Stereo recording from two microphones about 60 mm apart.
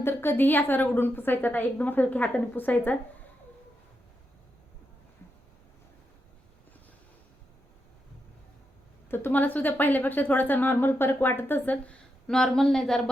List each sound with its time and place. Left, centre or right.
0.0 s a woman's voice: left
9.0 s a woman's voice: left
12.3 s speech: centre